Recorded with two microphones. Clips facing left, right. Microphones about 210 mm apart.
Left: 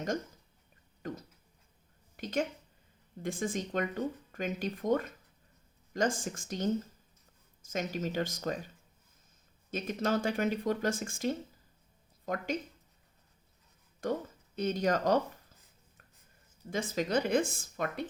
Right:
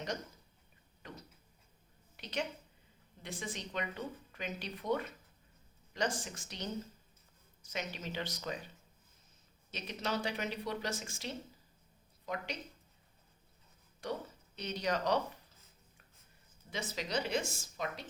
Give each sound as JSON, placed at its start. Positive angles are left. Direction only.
{"t": 1.0, "sound": "a woman's voice", "side_deg": 45}
{"t": 9.7, "sound": "speech", "side_deg": 50}
{"t": 14.0, "sound": "speech", "side_deg": 50}
{"t": 16.6, "sound": "speech", "side_deg": 50}